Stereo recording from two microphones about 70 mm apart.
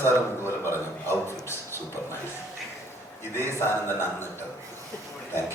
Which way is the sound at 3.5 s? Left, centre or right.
Left.